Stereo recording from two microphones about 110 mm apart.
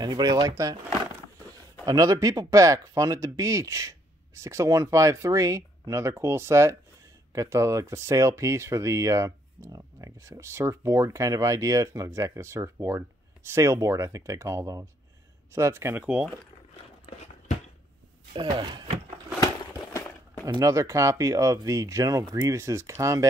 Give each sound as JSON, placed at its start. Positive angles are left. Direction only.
{"t": 0.0, "sound": "speech", "side_deg": -35}
{"t": 1.9, "sound": "speech", "side_deg": -30}
{"t": 16.0, "sound": "speech", "side_deg": -10}
{"t": 18.3, "sound": "speech", "side_deg": -45}
{"t": 20.4, "sound": "speech", "side_deg": -30}